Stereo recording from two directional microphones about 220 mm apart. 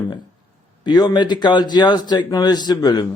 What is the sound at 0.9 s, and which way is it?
A man's voice, 20° left (ahead or behind).